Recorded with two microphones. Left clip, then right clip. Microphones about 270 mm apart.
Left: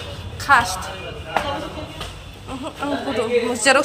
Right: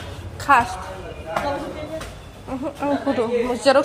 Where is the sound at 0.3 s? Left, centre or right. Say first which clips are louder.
Left 1 dB; centre.